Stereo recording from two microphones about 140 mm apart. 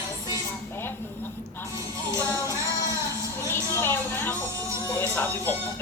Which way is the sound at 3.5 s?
15° left (ahead or behind).